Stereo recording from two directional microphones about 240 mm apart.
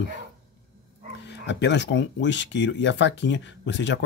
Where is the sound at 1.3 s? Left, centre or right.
Left.